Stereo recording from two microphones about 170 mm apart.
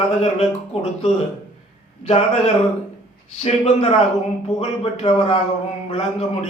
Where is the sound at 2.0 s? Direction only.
40° left (ahead or behind).